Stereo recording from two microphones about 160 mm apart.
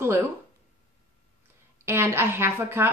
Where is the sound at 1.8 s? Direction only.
15° right (ahead or behind).